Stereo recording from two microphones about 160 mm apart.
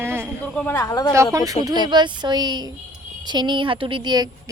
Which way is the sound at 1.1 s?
20° right (ahead or behind).